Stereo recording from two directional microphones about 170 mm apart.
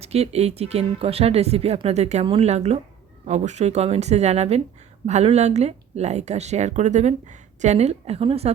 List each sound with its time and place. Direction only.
0.0 s speech: 35° right (ahead or behind)